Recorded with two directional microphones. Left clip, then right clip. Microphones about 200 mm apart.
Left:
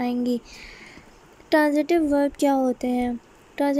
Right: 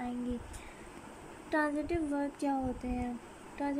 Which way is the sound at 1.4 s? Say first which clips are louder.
Left 13 dB; 35° left (ahead or behind).